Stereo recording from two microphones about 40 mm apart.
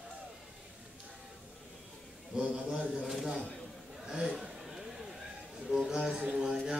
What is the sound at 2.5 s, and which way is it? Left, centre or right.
Speech, right.